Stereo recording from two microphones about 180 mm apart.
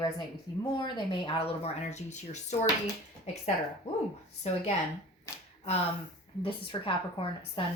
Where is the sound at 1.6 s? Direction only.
40° left (ahead or behind).